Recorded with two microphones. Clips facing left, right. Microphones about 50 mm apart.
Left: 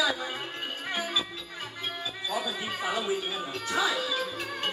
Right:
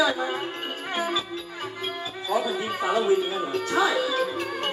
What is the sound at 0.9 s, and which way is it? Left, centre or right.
Speech, right.